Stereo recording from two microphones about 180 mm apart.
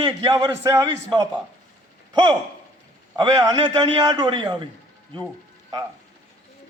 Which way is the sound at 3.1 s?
25° right (ahead or behind).